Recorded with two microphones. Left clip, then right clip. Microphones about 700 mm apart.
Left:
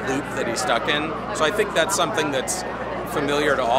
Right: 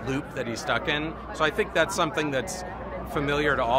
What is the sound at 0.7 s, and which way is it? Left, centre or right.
Speech, right.